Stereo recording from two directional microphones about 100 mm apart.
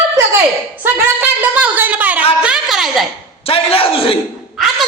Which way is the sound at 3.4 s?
70° left (ahead or behind).